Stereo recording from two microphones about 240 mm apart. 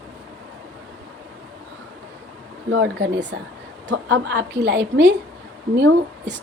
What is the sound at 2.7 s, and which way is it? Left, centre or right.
A woman's voice, right.